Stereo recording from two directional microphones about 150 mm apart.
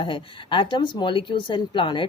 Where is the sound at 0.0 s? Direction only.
35° left (ahead or behind).